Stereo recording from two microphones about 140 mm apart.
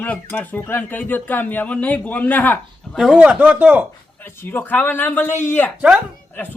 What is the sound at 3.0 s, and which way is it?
Speech, 5° right (ahead or behind).